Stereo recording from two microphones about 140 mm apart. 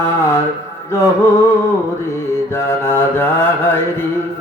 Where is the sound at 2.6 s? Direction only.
15° left (ahead or behind).